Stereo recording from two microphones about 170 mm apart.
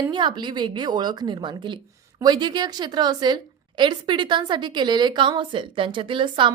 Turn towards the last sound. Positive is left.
turn(degrees=-30)  # may be behind; listen again after turning